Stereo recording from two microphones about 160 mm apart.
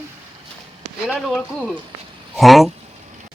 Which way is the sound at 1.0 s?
Centre (ahead or behind).